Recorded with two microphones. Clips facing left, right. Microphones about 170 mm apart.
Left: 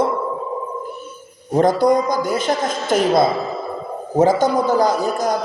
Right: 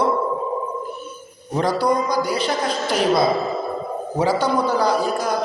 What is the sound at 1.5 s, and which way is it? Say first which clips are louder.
A man's voice: left 5 dB; 50° left (ahead or behind).